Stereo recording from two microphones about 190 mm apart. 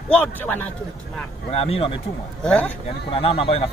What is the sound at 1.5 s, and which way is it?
Speech, 30° left (ahead or behind).